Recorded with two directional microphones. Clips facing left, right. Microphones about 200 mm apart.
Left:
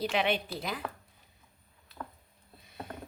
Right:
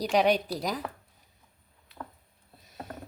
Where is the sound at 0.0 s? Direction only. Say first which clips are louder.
Right 6 dB; 40° right (ahead or behind).